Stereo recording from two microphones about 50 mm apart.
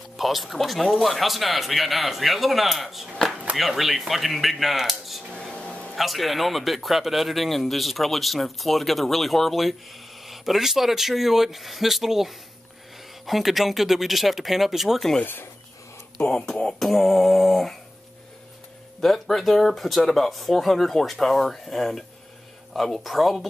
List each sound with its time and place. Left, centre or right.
0.2 s speech: centre
5.3 s a sound: left
5.9 s speech: centre
16.3 s beatboxing: centre
16.9 s speech: centre
18.9 s speech: centre